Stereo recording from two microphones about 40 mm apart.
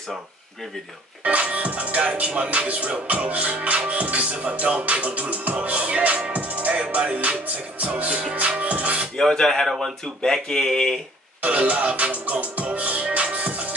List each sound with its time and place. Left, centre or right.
1.2 s music: right
6.7 s music: right
9.2 s speech: centre
11.4 s music: right